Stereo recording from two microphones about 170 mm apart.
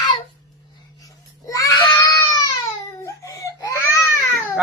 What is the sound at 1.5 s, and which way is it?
Child singing, 20° left (ahead or behind).